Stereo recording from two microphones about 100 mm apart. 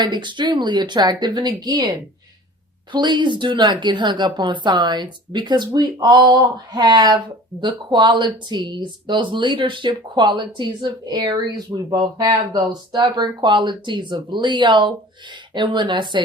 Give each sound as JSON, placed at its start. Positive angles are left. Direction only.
{"t": 0.0, "sound": "speech", "side_deg": -50}